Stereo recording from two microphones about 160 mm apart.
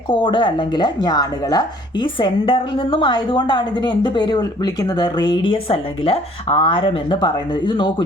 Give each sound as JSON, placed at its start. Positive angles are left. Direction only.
{"t": 0.1, "sound": "speech", "side_deg": 30}